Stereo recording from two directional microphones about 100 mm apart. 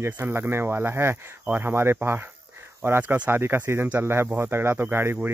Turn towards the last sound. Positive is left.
turn(degrees=-20)  # may be behind; listen again after turning